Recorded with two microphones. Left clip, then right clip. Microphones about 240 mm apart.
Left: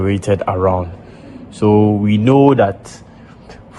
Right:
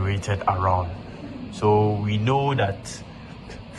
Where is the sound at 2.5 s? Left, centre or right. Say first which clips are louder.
Left 11 dB; centre.